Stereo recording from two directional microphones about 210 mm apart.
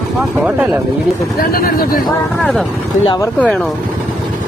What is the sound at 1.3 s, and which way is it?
Speech, 45° left (ahead or behind).